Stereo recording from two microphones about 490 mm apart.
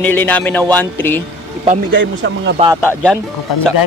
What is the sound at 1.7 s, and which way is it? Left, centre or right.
Speech, right.